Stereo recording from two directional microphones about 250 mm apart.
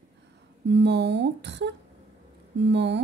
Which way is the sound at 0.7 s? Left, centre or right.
Right.